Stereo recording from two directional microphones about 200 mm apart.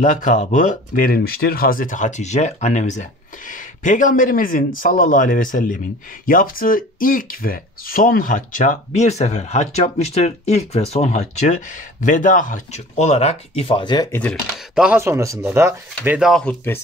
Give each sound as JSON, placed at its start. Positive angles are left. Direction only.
{"t": 0.0, "sound": "speech", "side_deg": 35}
{"t": 14.8, "sound": "speech", "side_deg": -10}